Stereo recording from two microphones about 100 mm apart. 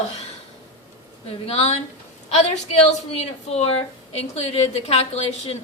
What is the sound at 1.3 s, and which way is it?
Speech, 75° left (ahead or behind).